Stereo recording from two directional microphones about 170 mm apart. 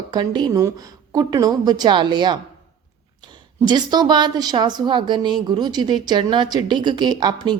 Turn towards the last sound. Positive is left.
turn(degrees=-25)  # may be behind; listen again after turning